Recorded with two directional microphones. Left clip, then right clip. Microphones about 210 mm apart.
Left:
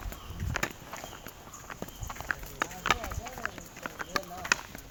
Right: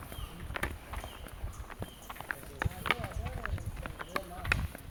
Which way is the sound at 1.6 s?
55° left (ahead or behind).